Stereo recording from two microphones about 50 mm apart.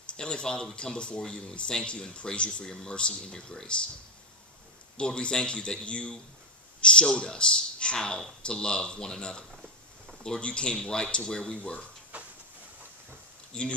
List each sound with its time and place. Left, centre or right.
0.2 s speech: centre
4.9 s speech: centre
12.1 s a sound: right
13.5 s speech: left